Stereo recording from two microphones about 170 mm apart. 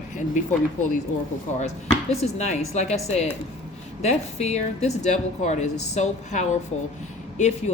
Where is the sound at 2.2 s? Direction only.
40° left (ahead or behind).